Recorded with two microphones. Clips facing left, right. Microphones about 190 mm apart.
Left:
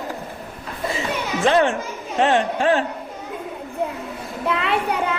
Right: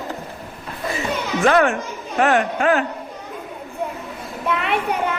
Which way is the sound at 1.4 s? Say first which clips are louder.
Right 1 dB; 25° left (ahead or behind).